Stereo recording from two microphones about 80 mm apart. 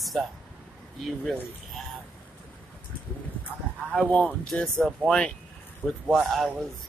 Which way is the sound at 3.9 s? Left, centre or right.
Centre.